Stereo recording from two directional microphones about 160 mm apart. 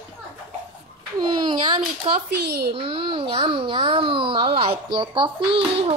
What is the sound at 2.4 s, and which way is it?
Speech, 90° right.